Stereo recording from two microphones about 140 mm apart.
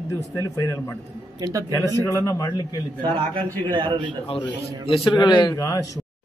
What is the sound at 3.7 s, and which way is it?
Speech, 40° right (ahead or behind).